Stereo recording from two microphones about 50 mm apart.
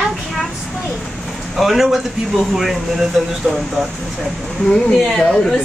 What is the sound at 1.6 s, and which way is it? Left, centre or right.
Speech, centre.